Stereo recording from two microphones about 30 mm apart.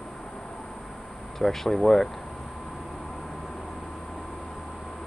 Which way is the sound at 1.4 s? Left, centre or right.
Centre.